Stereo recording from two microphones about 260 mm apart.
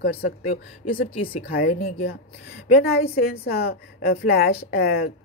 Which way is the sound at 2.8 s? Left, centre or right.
Left.